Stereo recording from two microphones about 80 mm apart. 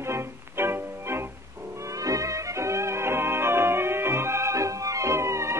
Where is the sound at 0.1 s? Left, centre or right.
Right.